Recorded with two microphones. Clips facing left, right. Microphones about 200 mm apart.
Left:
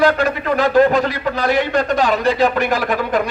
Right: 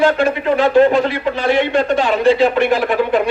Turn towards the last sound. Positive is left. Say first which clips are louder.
# right 4 dB
turn(degrees=40)  # may be behind; listen again after turning